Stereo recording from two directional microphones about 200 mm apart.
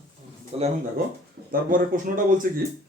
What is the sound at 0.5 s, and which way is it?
Speech, 30° right (ahead or behind).